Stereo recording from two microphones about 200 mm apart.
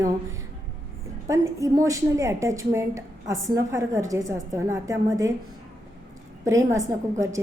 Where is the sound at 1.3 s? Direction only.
15° right (ahead or behind).